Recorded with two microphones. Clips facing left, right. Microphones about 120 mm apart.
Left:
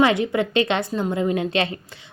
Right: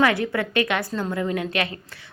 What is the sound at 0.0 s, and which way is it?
A woman's voice, 20° left (ahead or behind).